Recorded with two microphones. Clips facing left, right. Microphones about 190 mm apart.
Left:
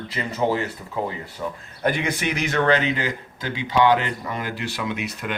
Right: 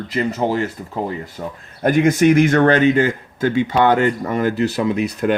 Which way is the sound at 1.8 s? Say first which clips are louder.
Right 10 dB; 45° right (ahead or behind).